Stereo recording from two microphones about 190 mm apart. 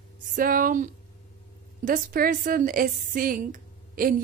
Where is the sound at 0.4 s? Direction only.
45° right (ahead or behind).